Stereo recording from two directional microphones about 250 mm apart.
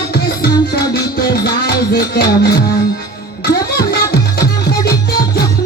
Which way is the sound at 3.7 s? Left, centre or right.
Left.